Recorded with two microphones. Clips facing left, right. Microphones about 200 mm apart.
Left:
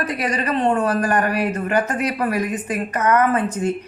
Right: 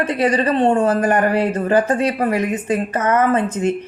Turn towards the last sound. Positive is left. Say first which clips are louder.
# right 3 dB
turn(degrees=-25)  # may be behind; listen again after turning